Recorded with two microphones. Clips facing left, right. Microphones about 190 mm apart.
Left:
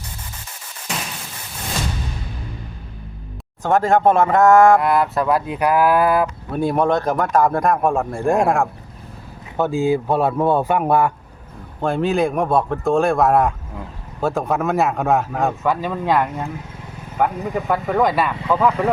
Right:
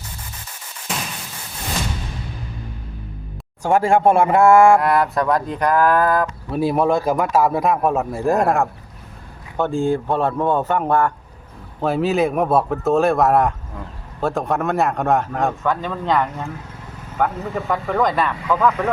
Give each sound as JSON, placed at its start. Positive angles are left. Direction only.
{"t": 3.6, "sound": "a man's voice", "side_deg": -10}
{"t": 4.8, "sound": "speech", "side_deg": 0}
{"t": 6.5, "sound": "speech", "side_deg": -5}
{"t": 11.8, "sound": "speech", "side_deg": -5}
{"t": 18.3, "sound": "speech", "side_deg": 25}